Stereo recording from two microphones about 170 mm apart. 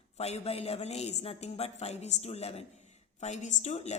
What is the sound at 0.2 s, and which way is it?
A woman's voice, 40° left (ahead or behind).